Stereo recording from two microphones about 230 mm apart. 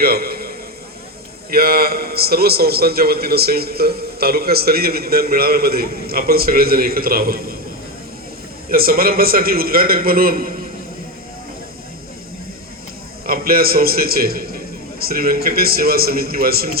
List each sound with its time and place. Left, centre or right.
0.0 s a sound: right
1.5 s a man's voice: right
8.7 s a man's voice: right
13.2 s a man's voice: right